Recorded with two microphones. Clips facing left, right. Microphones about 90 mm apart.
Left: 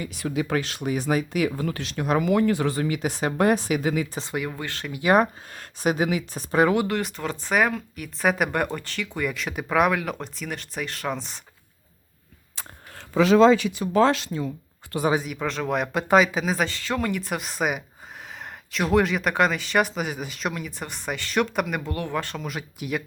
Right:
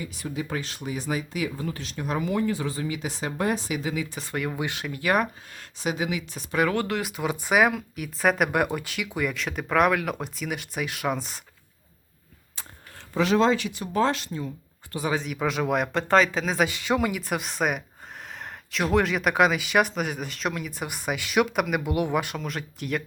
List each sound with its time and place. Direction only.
0.0 s speech: 75° left (ahead or behind); by 4.0 s 50° left (ahead or behind)
4.5 s speech: 15° right (ahead or behind)
5.0 s speech: 30° left (ahead or behind)
5.5 s speech: 50° left (ahead or behind)
6.8 s speech: centre (ahead or behind)
13.9 s speech: 90° left
15.2 s speech: 5° right (ahead or behind)
16.6 s speech: 15° right (ahead or behind)
17.1 s speech: centre (ahead or behind)
21.9 s speech: 15° right (ahead or behind)
22.4 s speech: 5° left (ahead or behind)